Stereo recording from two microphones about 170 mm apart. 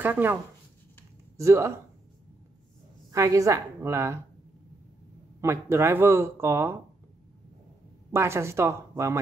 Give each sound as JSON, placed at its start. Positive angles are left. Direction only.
{"t": 0.0, "sound": "speech", "side_deg": -10}
{"t": 3.1, "sound": "speech", "side_deg": -20}
{"t": 5.4, "sound": "speech", "side_deg": -15}
{"t": 8.1, "sound": "speech", "side_deg": -15}